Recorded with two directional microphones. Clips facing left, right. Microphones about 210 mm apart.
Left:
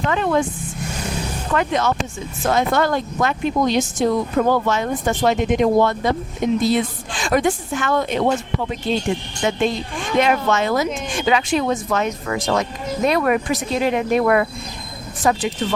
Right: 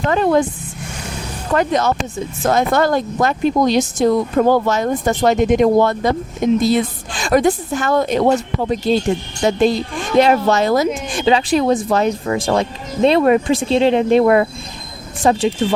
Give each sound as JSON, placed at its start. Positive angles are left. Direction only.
{"t": 0.1, "sound": "speech", "side_deg": -40}
{"t": 1.5, "sound": "speech", "side_deg": -40}